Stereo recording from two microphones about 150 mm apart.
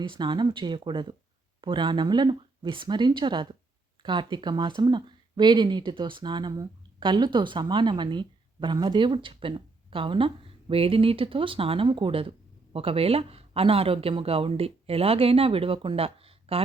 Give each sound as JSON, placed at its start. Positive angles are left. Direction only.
{"t": 0.0, "sound": "speech", "side_deg": -30}